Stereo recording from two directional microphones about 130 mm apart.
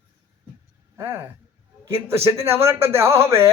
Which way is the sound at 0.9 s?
20° right (ahead or behind).